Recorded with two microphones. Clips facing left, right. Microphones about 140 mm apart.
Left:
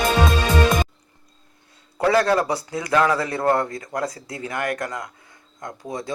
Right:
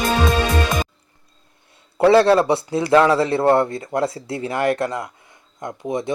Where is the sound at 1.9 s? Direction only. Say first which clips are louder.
Right 6 dB; 25° right (ahead or behind).